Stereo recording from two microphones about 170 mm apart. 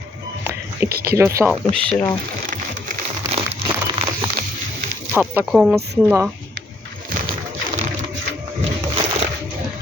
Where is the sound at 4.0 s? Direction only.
35° right (ahead or behind).